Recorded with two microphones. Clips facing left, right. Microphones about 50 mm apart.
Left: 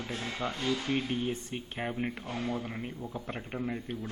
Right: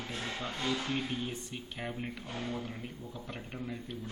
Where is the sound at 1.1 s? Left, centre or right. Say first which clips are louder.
Left 5 dB; left.